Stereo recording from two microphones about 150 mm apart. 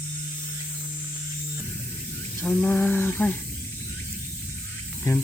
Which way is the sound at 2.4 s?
5° left (ahead or behind).